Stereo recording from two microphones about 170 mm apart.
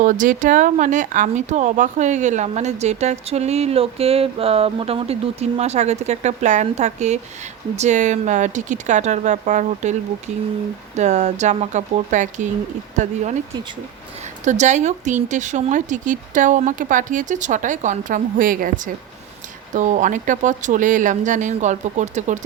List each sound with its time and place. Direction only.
0.0 s speech: 50° right (ahead or behind)
10.9 s speech: 45° right (ahead or behind)
14.4 s speech: 45° right (ahead or behind)